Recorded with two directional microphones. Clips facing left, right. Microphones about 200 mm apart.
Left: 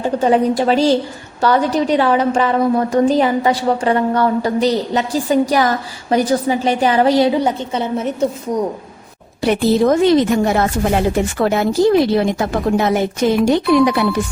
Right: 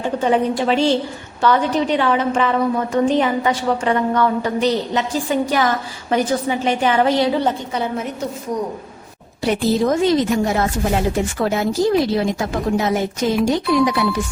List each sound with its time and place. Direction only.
0.2 s a woman's voice: 40° left (ahead or behind)
9.4 s speech: 65° left (ahead or behind)